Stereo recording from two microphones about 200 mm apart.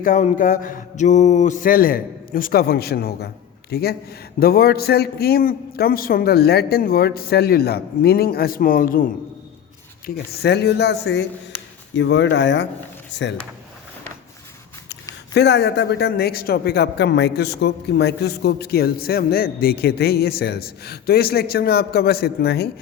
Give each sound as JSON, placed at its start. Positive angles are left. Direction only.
{"t": 0.0, "sound": "a man's voice", "side_deg": 40}
{"t": 10.4, "sound": "speech", "side_deg": 55}
{"t": 15.3, "sound": "speech", "side_deg": 55}